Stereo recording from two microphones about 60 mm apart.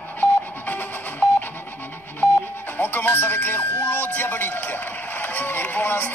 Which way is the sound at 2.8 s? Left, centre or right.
Left.